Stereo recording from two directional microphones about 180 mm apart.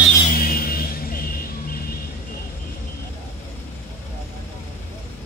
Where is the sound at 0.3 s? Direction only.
55° left (ahead or behind).